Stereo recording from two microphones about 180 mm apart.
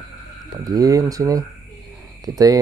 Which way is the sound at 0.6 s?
20° right (ahead or behind).